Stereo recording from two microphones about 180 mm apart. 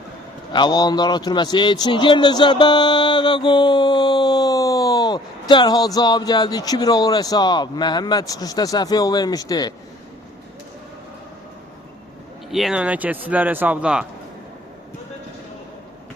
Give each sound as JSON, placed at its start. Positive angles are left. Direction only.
{"t": 0.5, "sound": "a man's voice", "side_deg": 25}
{"t": 12.5, "sound": "speech", "side_deg": 0}